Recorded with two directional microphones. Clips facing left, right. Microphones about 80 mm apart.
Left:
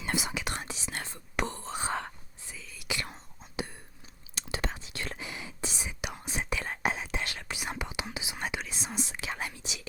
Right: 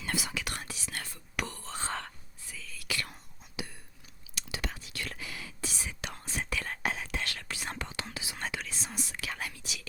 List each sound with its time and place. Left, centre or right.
0.0 s whispering: left